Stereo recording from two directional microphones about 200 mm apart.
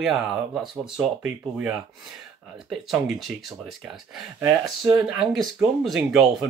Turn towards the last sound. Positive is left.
turn(degrees=0)  # may be behind; listen again after turning